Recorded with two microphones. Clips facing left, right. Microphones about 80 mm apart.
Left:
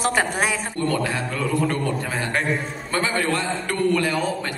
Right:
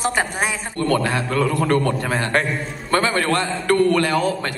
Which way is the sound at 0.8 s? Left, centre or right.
Right.